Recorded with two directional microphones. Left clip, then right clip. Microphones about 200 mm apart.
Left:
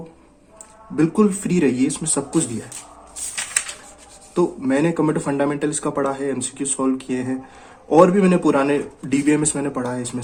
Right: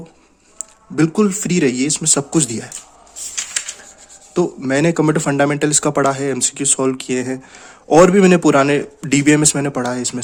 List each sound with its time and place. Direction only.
0.6 s speech: 40° right (ahead or behind)
4.4 s speech: 40° right (ahead or behind)